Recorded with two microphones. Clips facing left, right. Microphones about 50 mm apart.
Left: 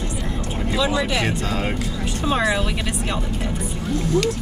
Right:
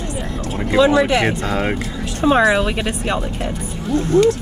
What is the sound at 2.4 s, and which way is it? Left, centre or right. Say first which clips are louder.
Speech: right 6 dB; right.